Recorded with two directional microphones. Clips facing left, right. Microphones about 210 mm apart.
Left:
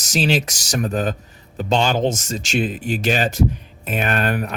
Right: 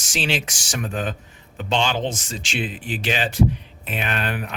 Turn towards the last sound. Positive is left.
turn(degrees=45)  # may be behind; listen again after turning